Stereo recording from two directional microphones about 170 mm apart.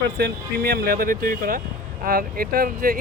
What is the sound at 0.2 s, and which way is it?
Speech, 70° right (ahead or behind).